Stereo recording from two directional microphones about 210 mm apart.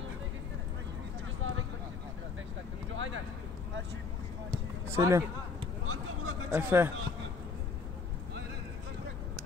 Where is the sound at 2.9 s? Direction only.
65° right (ahead or behind).